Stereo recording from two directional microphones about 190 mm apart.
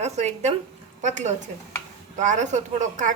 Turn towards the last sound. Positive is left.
turn(degrees=-40)  # may be behind; listen again after turning